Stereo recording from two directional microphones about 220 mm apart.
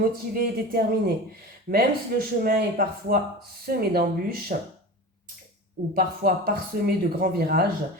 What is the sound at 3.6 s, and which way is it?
Speech, 45° right (ahead or behind).